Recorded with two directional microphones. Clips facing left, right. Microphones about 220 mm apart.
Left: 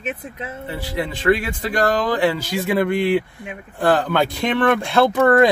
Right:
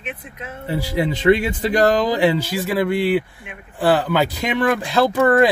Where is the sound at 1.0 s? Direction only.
25° right (ahead or behind).